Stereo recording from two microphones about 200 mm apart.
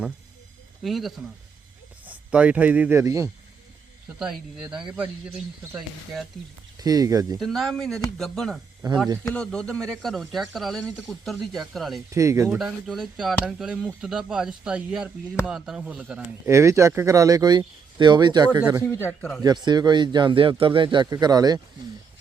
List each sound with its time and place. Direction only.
0.8 s speech: centre (ahead or behind)
2.3 s speech: 5° right (ahead or behind)
4.2 s speech: 5° right (ahead or behind)
6.7 s speech: 20° right (ahead or behind)
7.3 s speech: centre (ahead or behind)
8.8 s speech: 20° right (ahead or behind)
9.2 s speech: 5° left (ahead or behind)
12.1 s speech: 15° right (ahead or behind)
12.5 s speech: centre (ahead or behind); by 18.6 s 20° right (ahead or behind)
18.9 s speech: 10° left (ahead or behind)
19.4 s speech: 20° right (ahead or behind)